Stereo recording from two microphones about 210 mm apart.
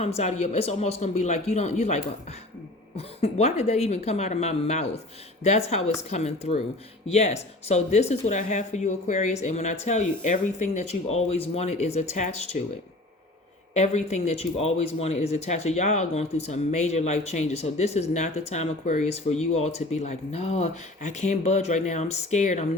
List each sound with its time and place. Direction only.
0.2 s speech: 30° left (ahead or behind)
13.7 s speech: 30° left (ahead or behind)